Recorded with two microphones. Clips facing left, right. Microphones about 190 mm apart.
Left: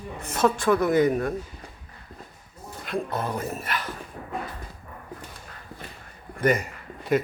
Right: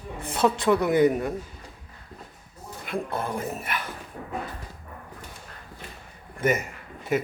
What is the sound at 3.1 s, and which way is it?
Speech, 10° right (ahead or behind).